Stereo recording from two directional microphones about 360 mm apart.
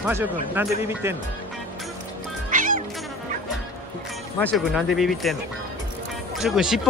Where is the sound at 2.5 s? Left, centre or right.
Right.